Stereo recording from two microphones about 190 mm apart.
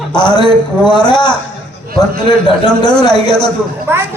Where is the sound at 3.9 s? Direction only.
10° right (ahead or behind).